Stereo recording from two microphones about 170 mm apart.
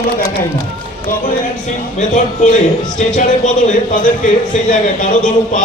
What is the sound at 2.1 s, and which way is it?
A man's voice, 45° left (ahead or behind).